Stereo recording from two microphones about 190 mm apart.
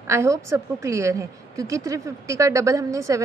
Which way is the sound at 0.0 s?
15° right (ahead or behind).